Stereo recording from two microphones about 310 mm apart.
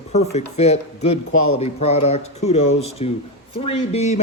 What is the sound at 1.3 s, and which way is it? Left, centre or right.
Speech, left.